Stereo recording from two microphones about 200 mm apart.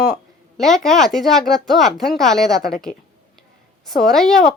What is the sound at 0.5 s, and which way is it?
Speech, centre (ahead or behind).